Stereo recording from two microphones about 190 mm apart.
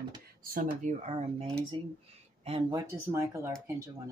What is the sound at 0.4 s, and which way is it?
Speech, 50° right (ahead or behind).